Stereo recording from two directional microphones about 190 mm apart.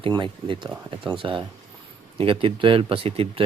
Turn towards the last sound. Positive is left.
turn(degrees=-30)  # may be behind; listen again after turning